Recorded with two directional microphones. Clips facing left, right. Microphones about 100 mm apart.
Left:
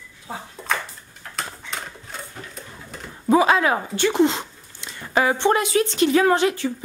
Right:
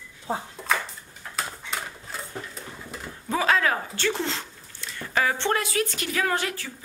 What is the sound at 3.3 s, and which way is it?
Speech, 20° left (ahead or behind).